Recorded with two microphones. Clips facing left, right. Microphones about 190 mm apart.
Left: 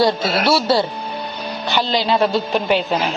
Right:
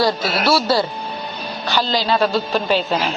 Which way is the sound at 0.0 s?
25° left (ahead or behind).